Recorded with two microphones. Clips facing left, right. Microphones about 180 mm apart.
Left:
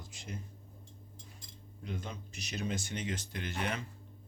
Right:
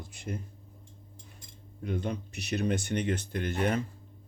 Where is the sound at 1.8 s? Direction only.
60° right (ahead or behind).